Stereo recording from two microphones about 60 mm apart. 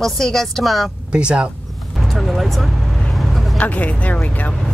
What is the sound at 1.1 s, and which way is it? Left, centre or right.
Speech, centre.